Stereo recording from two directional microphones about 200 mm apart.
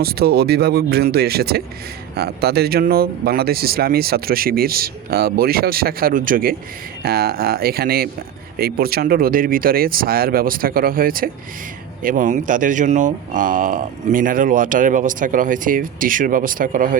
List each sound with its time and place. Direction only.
0.0 s speech: 50° right (ahead or behind)